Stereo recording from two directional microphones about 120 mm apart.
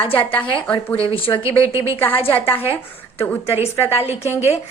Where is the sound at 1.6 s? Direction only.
25° right (ahead or behind).